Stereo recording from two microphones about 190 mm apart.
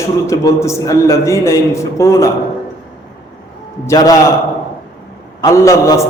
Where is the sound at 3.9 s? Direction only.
20° left (ahead or behind).